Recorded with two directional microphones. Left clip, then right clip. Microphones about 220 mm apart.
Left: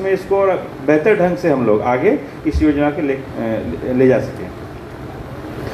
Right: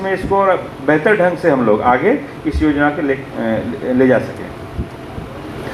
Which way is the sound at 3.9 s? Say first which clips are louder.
Even; 25° right (ahead or behind).